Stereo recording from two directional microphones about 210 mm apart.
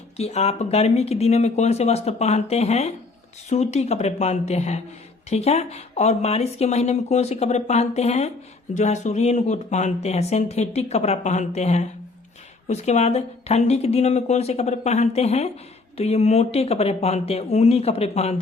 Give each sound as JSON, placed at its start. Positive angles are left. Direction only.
{"t": 0.2, "sound": "speech", "side_deg": 30}